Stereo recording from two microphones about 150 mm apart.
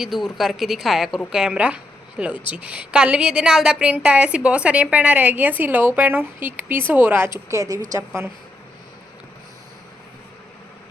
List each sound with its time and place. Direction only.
0.0 s a woman's voice: 5° right (ahead or behind)